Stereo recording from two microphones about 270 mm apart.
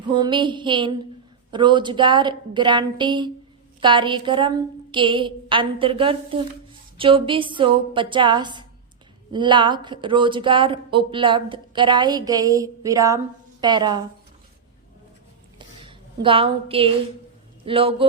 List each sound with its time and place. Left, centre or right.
0.1 s speech: centre
15.5 s a sound: centre
17.7 s speech: centre